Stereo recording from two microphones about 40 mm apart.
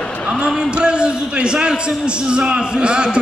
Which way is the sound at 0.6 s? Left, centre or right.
Right.